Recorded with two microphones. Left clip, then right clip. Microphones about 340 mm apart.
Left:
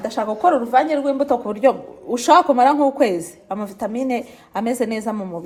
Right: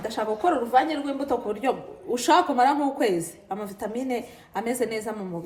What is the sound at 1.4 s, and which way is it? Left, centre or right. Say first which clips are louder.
A woman's voice: left 9 dB; centre.